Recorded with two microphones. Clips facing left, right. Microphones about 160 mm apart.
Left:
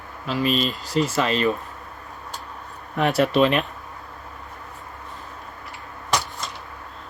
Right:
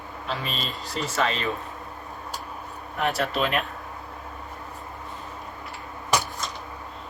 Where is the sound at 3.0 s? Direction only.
80° left.